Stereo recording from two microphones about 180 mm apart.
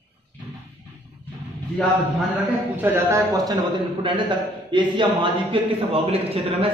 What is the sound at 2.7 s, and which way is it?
A man's voice, 10° right (ahead or behind).